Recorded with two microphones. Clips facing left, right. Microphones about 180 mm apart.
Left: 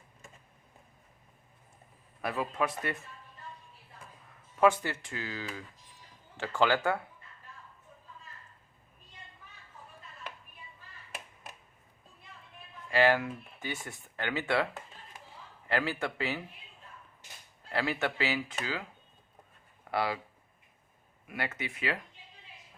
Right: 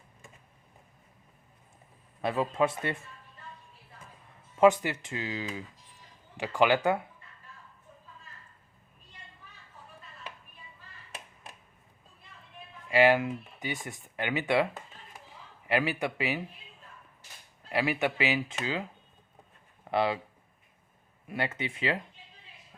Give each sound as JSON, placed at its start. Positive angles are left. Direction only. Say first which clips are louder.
{"t": 2.2, "sound": "speech", "louder": "right 5 dB", "side_deg": -25}
{"t": 4.5, "sound": "speech", "louder": "right 4 dB", "side_deg": -20}
{"t": 12.9, "sound": "speech", "louder": "right 3 dB", "side_deg": -15}
{"t": 17.7, "sound": "speech", "louder": "right 3 dB", "side_deg": -15}
{"t": 19.8, "sound": "a sound", "louder": "right 4 dB", "side_deg": -25}
{"t": 21.2, "sound": "speech", "louder": "right 4 dB", "side_deg": -25}